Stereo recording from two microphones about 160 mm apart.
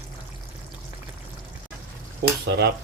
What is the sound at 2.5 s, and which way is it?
Stir, 90° right.